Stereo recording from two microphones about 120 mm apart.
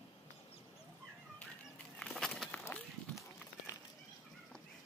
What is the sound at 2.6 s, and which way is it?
Run, 25° left (ahead or behind).